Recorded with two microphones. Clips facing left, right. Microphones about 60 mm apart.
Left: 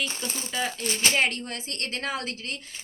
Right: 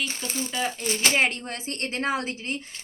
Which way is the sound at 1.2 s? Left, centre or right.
Right.